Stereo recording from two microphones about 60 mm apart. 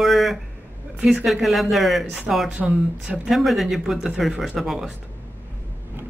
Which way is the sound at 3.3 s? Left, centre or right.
Centre.